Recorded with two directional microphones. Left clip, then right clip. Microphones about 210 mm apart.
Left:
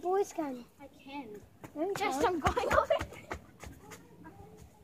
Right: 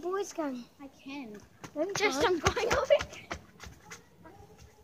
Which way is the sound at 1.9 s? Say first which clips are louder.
Right 3 dB; 35° right (ahead or behind).